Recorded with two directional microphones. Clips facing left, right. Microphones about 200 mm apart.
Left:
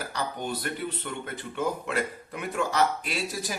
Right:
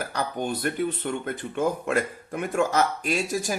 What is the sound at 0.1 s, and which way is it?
Speech, 50° right (ahead or behind).